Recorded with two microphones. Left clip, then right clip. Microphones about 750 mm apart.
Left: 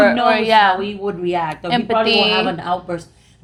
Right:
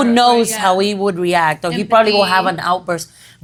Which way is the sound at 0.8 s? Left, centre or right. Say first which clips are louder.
Right 7 dB; right.